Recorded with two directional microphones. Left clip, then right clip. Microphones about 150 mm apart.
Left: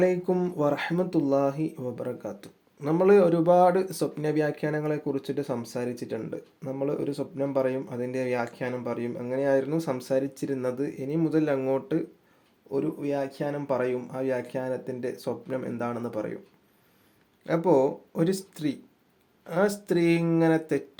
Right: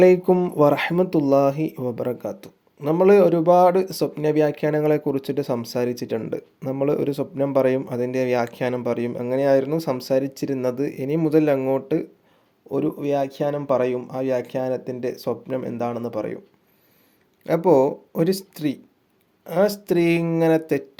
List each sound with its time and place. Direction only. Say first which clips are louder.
0.0 s speech: right 9 dB; 30° right (ahead or behind)
12.7 s speech: right 6 dB; 40° right (ahead or behind)
17.4 s speech: right 6 dB; 30° right (ahead or behind)